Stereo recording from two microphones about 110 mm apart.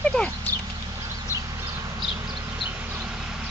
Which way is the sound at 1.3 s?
30° right (ahead or behind).